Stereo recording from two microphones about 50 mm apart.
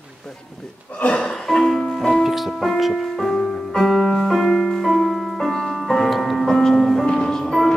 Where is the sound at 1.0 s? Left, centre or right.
Left.